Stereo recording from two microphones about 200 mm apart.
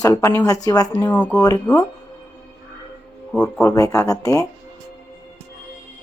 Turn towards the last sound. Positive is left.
turn(degrees=15)  # may be behind; listen again after turning